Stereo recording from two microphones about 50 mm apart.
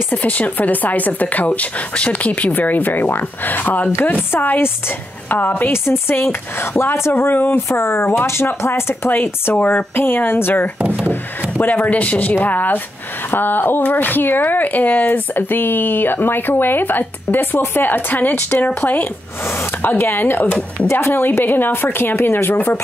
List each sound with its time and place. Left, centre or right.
0.1 s speech: left
4.3 s speech: left
5.7 s speech: left
11.6 s speech: left
20.8 s speech: left